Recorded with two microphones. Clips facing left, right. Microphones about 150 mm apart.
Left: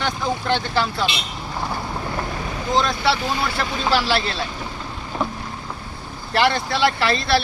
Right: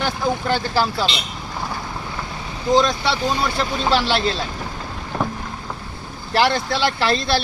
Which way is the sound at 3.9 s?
Centre (ahead or behind).